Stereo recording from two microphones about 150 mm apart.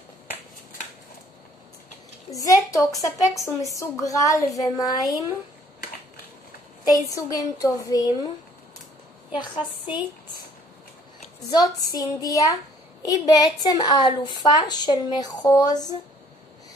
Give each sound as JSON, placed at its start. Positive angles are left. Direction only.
{"t": 2.3, "sound": "a woman's voice", "side_deg": 20}
{"t": 7.2, "sound": "a woman's voice", "side_deg": 20}
{"t": 9.3, "sound": "a woman's voice", "side_deg": 30}
{"t": 11.4, "sound": "a woman's voice", "side_deg": 25}